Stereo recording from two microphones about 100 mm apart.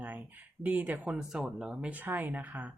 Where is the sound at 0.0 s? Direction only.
15° right (ahead or behind).